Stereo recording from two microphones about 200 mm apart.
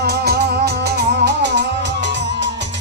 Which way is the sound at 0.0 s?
55° right (ahead or behind).